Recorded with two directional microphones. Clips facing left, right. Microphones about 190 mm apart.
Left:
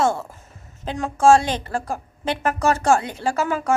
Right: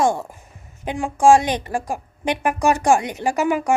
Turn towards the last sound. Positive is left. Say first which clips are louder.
# right 3 dB
turn(degrees=-15)  # may be behind; listen again after turning